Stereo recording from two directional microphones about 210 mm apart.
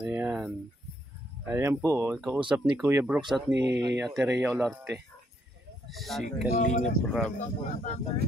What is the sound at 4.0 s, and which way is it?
Speech, 5° right (ahead or behind).